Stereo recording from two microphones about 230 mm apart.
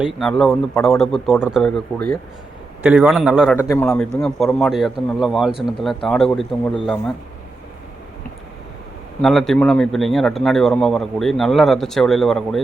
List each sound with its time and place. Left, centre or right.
0.0 s a man's voice: centre
2.8 s a man's voice: centre
3.5 s a man's voice: centre
5.5 s speech: left
5.8 s a man's voice: centre
9.2 s a man's voice: centre